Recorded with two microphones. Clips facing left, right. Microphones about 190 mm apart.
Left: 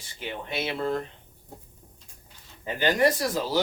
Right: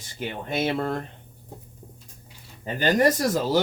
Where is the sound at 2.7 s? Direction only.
45° right (ahead or behind).